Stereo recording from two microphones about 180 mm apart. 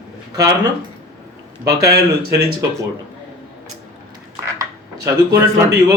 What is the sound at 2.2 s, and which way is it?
Speech, 60° right (ahead or behind).